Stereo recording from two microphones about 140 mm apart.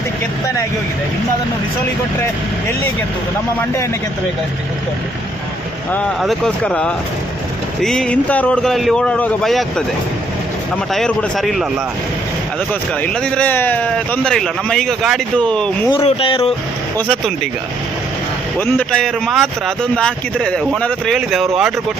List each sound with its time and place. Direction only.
6.1 s speech: centre (ahead or behind)
10.9 s speech: 5° left (ahead or behind)
12.9 s speech: 5° left (ahead or behind)
15.9 s speech: 40° left (ahead or behind)
17.0 s speech: 5° left (ahead or behind)
18.6 s speech: 10° left (ahead or behind)